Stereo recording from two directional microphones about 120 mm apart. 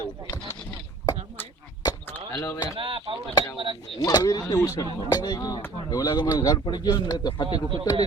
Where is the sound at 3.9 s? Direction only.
30° left (ahead or behind).